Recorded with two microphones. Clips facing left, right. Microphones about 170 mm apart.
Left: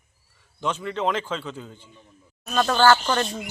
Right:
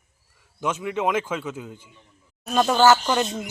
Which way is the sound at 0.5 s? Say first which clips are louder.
Right 1 dB; 10° right (ahead or behind).